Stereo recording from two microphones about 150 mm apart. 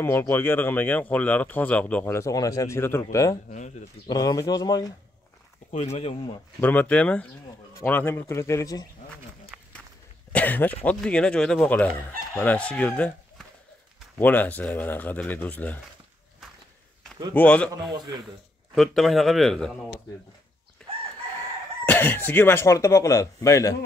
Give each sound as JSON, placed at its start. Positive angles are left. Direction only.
{"t": 0.0, "sound": "speech", "side_deg": 15}
{"t": 5.7, "sound": "speech", "side_deg": 45}
{"t": 6.6, "sound": "speech", "side_deg": 10}
{"t": 10.3, "sound": "speech", "side_deg": 10}
{"t": 17.3, "sound": "speech", "side_deg": 10}
{"t": 20.8, "sound": "chicken", "side_deg": 5}
{"t": 21.8, "sound": "speech", "side_deg": 15}